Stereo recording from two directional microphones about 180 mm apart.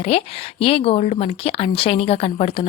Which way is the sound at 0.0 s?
35° left (ahead or behind).